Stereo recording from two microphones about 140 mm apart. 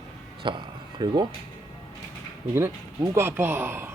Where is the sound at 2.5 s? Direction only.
20° right (ahead or behind).